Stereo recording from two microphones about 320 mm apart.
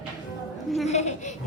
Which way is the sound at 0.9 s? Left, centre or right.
Left.